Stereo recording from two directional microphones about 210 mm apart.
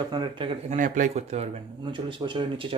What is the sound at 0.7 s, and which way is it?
Speech, 40° right (ahead or behind).